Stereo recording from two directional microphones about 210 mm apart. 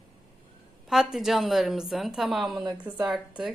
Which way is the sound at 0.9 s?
Centre (ahead or behind).